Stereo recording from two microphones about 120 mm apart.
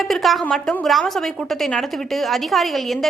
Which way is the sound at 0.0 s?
Centre (ahead or behind).